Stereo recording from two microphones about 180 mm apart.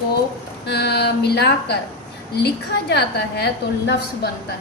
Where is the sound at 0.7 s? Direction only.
65° left (ahead or behind).